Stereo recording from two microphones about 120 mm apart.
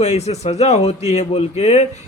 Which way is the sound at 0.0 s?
65° left (ahead or behind).